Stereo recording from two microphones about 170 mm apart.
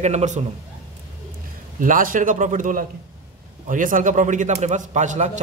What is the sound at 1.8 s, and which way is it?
A man's voice, 50° right (ahead or behind).